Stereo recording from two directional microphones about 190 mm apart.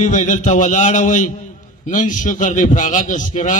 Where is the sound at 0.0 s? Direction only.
40° left (ahead or behind).